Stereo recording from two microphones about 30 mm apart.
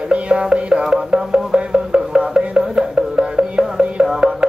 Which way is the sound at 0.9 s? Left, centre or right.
Right.